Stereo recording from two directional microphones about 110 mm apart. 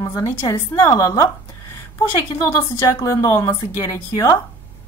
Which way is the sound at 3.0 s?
30° left (ahead or behind).